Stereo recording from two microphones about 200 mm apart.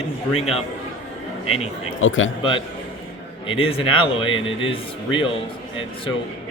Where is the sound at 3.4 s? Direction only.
25° left (ahead or behind).